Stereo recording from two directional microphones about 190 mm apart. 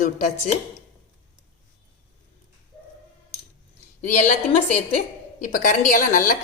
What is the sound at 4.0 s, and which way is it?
A woman's voice, 40° left (ahead or behind).